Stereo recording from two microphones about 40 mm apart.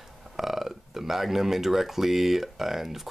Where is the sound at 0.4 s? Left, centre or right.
Centre.